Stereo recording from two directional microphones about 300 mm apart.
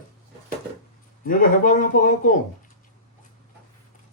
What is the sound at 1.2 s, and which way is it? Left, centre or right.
A man's voice, left.